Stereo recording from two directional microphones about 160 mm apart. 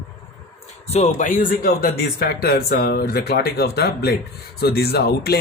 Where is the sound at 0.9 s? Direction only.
45° left (ahead or behind).